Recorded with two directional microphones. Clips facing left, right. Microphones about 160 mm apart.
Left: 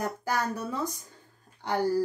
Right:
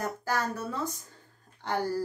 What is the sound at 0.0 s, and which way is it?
A woman's voice, 15° left (ahead or behind).